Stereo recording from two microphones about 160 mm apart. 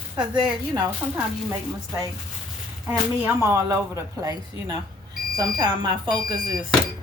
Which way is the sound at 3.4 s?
20° right (ahead or behind).